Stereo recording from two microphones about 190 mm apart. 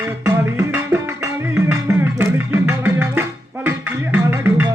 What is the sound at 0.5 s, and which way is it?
Music, 10° right (ahead or behind).